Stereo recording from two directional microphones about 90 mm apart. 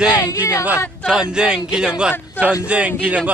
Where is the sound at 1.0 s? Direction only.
10° right (ahead or behind).